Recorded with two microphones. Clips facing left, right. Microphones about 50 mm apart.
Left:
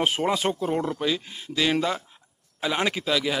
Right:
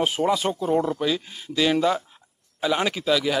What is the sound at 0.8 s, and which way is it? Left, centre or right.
A man's voice, centre.